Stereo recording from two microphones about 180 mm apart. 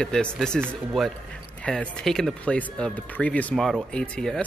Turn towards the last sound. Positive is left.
turn(degrees=5)  # may be behind; listen again after turning